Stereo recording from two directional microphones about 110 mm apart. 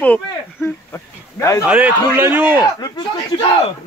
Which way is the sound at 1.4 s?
25° left (ahead or behind).